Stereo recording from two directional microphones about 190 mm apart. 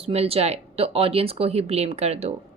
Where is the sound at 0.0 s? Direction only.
35° right (ahead or behind).